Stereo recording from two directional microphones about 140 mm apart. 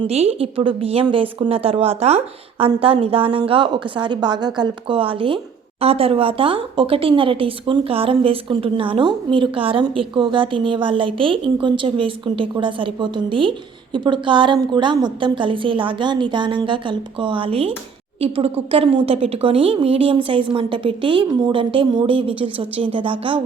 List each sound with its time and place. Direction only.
0.1 s a woman's voice: 45° right (ahead or behind)